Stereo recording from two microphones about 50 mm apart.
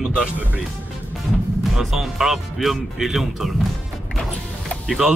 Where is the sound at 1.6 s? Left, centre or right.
Centre.